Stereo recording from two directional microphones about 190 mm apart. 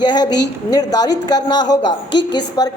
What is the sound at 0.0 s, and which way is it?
A woman's voice, 20° left (ahead or behind).